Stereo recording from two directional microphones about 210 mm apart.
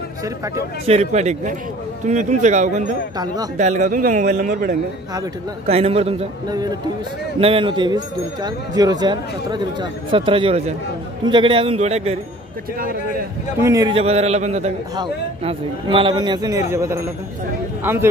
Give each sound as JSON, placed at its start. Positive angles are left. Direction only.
{"t": 0.8, "sound": "a man's voice", "side_deg": -30}
{"t": 5.7, "sound": "speech", "side_deg": -30}
{"t": 13.6, "sound": "speech", "side_deg": -15}
{"t": 13.9, "sound": "a man's voice", "side_deg": -30}